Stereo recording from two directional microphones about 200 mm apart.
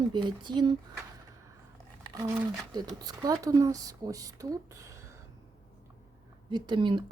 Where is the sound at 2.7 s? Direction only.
20° right (ahead or behind).